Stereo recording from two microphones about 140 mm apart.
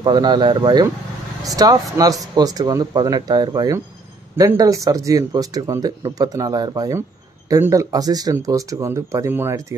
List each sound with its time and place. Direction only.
0.0 s speech: 30° right (ahead or behind)